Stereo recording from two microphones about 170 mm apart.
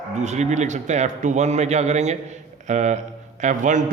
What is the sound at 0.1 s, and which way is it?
A man's voice, 45° right (ahead or behind).